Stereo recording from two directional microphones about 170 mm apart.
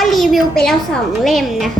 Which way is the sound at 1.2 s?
Centre (ahead or behind).